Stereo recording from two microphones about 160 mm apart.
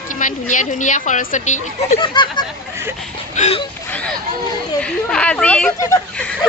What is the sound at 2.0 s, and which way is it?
Speech, 30° left (ahead or behind).